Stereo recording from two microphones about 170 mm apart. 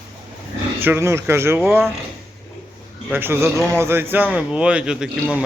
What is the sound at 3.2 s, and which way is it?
Speech, 15° right (ahead or behind).